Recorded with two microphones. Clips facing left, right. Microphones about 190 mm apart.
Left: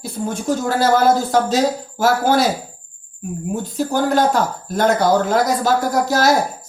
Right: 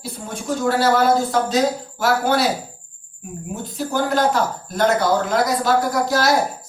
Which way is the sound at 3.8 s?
45° left (ahead or behind).